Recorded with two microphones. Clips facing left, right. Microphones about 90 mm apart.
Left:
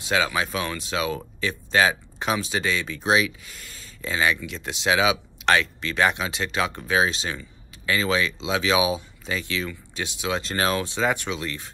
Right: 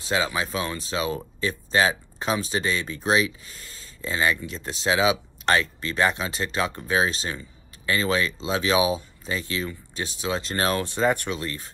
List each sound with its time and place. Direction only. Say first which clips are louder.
0.0 s speech: left 1 dB; 30° right (ahead or behind)
6.7 s speech: left 2 dB; 30° left (ahead or behind)
7.1 s speech: even; 40° right (ahead or behind)
11.3 s speech: even; 5° left (ahead or behind)